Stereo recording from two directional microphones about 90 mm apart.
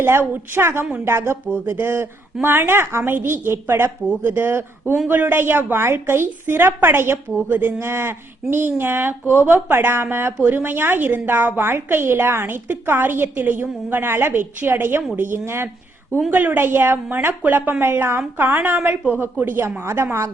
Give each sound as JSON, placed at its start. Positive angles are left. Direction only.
{"t": 0.0, "sound": "a woman's voice", "side_deg": -25}